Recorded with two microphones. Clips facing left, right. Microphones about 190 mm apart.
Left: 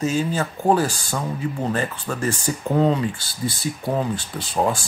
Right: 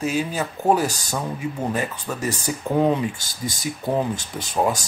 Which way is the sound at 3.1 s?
45° right (ahead or behind).